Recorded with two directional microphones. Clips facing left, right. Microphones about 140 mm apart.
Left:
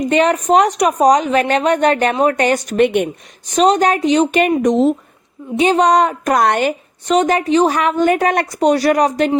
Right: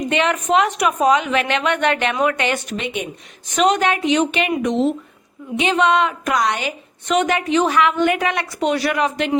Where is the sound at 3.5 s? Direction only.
35° left (ahead or behind); by 6.7 s 50° left (ahead or behind).